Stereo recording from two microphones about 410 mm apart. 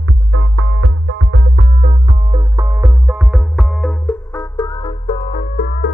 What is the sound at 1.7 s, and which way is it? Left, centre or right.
Music, centre.